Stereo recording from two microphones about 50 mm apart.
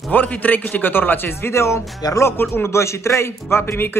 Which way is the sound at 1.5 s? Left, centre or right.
Left.